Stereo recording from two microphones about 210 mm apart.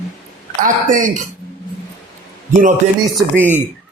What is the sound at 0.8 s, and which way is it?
Speech, 40° right (ahead or behind).